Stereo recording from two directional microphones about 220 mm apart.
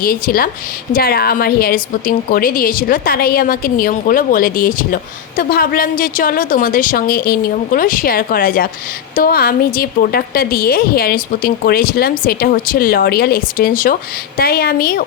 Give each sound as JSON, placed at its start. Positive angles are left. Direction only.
{"t": 0.0, "sound": "a woman's voice", "side_deg": 40}